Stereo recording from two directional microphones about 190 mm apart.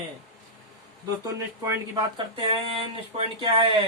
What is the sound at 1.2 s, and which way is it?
Speech, 15° right (ahead or behind).